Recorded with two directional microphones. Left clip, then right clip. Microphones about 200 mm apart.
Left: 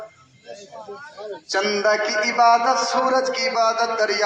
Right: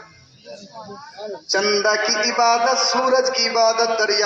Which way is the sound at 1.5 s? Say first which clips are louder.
Right 1 dB; 55° left (ahead or behind).